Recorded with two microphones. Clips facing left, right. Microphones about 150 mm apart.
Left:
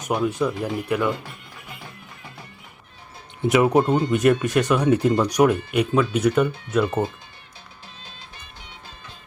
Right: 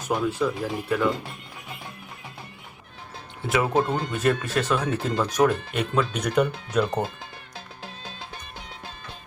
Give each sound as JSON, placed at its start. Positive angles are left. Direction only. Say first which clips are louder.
{"t": 0.0, "sound": "speech", "louder": "left 2 dB", "side_deg": 15}
{"t": 3.5, "sound": "speech", "louder": "left 5 dB", "side_deg": 20}